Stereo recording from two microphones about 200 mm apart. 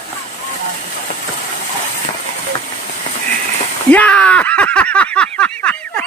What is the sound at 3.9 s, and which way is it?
Speech, 5° left (ahead or behind).